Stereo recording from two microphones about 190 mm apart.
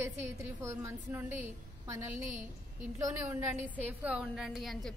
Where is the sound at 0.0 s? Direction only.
15° right (ahead or behind).